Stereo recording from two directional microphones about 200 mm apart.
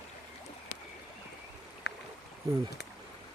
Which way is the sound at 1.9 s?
60° left (ahead or behind).